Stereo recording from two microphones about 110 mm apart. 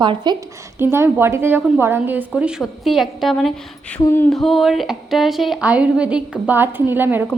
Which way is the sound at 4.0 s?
25° left (ahead or behind).